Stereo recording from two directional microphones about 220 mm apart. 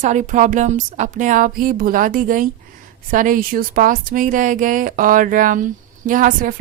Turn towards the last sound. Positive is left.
turn(degrees=-40)  # may be behind; listen again after turning